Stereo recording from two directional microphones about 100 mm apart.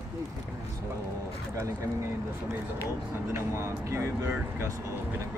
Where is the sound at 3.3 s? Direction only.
30° right (ahead or behind).